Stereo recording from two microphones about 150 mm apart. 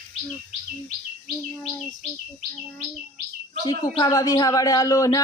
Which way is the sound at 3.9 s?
25° left (ahead or behind).